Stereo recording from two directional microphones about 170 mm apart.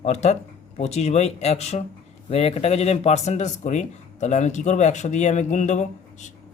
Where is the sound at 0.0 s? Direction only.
40° left (ahead or behind).